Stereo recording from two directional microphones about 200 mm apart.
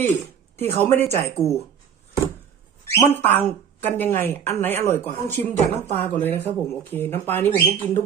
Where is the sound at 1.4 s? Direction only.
15° left (ahead or behind).